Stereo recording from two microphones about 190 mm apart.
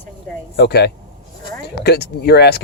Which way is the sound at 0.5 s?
60° left (ahead or behind).